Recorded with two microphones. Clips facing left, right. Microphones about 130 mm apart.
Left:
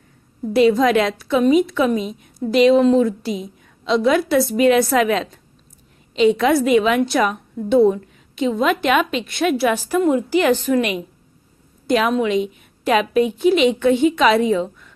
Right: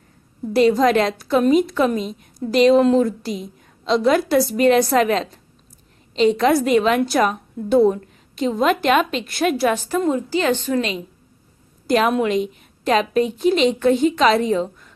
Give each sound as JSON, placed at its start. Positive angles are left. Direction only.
{"t": 0.5, "sound": "a woman's voice", "side_deg": 0}
{"t": 6.1, "sound": "a woman's voice", "side_deg": 0}
{"t": 9.7, "sound": "a woman's voice", "side_deg": 10}
{"t": 11.9, "sound": "a woman's voice", "side_deg": 0}
{"t": 12.3, "sound": "a sound", "side_deg": 0}
{"t": 13.0, "sound": "a woman's voice", "side_deg": 5}